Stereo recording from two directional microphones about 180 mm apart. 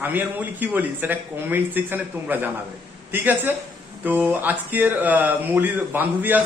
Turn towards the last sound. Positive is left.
turn(degrees=-10)  # may be behind; listen again after turning